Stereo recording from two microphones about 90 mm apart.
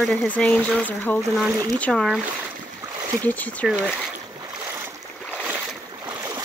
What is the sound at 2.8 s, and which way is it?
Boat, 35° right (ahead or behind).